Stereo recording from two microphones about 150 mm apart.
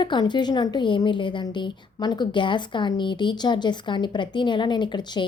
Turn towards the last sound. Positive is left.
turn(degrees=30)  # may be behind; listen again after turning